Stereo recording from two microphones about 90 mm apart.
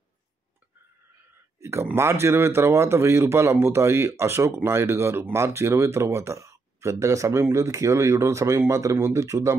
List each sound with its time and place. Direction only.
1.6 s speech: 30° right (ahead or behind)